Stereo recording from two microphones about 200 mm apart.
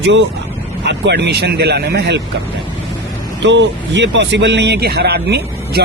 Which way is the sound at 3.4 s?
65° right (ahead or behind).